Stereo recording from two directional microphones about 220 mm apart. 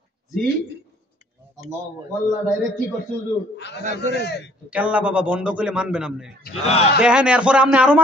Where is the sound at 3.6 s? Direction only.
50° left (ahead or behind).